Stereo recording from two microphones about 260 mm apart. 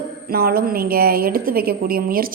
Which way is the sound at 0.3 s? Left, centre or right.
Right.